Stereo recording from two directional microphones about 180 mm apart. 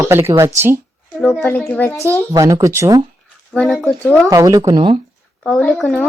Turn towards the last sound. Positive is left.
turn(degrees=5)  # may be behind; listen again after turning